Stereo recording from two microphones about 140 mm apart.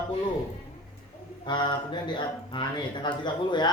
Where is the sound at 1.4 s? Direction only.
35° left (ahead or behind).